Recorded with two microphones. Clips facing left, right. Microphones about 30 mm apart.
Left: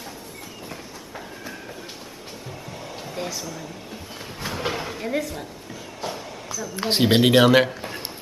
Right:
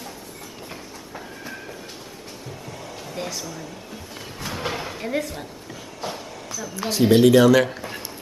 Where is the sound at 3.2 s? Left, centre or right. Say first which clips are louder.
Even; centre.